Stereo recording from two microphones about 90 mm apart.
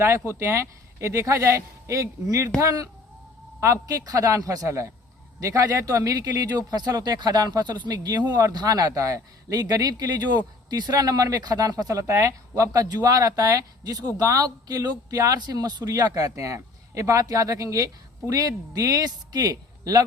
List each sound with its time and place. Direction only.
0.0 s a woman's voice: 30° right (ahead or behind); by 20.1 s 45° right (ahead or behind)